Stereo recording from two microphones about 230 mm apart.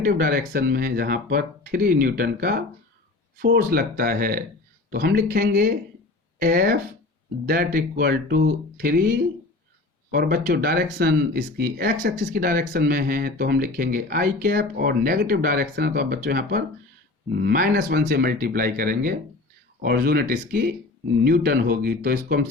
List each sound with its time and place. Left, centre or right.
0.0 s speech: right